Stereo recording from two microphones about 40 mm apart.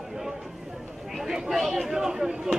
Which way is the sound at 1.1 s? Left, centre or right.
Centre.